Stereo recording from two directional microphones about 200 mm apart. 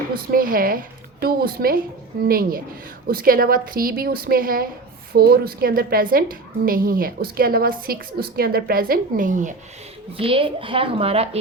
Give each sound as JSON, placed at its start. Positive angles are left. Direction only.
{"t": 0.3, "sound": "a woman's voice", "side_deg": -45}
{"t": 10.2, "sound": "a woman's voice", "side_deg": -25}